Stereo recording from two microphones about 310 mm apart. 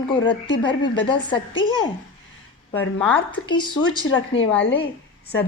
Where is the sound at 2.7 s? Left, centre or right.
Centre.